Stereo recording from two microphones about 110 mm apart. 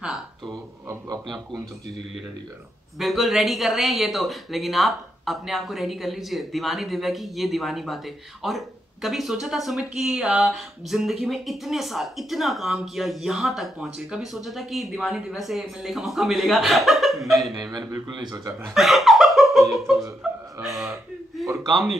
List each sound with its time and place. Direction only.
3.0 s speech: centre (ahead or behind)
17.6 s speech: 35° right (ahead or behind)
18.8 s laughter: centre (ahead or behind)
20.6 s a man's voice: centre (ahead or behind)